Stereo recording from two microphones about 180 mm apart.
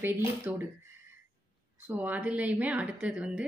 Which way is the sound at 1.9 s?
10° right (ahead or behind).